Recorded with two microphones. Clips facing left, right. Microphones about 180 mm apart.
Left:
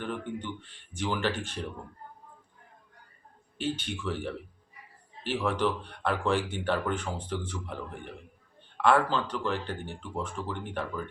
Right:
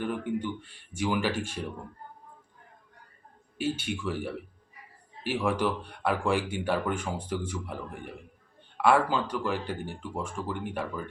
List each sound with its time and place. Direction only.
0.0 s speech: 10° right (ahead or behind)
3.6 s speech: 10° right (ahead or behind)